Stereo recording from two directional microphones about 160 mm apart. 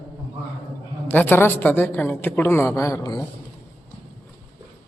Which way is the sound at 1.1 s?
10° left (ahead or behind).